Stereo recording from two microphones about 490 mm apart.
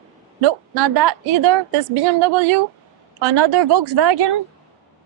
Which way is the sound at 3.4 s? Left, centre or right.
Right.